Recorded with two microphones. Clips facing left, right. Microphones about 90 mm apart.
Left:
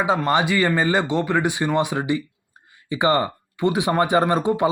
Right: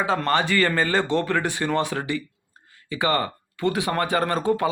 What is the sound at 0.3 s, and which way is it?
Speech, 15° left (ahead or behind).